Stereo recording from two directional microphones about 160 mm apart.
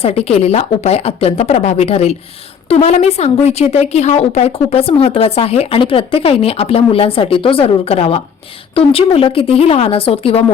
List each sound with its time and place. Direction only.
0.0 s speech: 40° left (ahead or behind)